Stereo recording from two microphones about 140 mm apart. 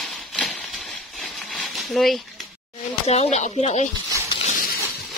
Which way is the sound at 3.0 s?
50° left (ahead or behind).